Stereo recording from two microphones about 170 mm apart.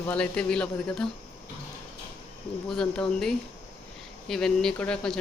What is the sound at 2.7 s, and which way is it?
Speech, 5° left (ahead or behind).